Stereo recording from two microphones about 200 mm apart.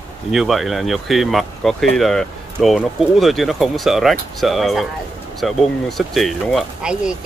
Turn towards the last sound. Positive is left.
turn(degrees=0)  # may be behind; listen again after turning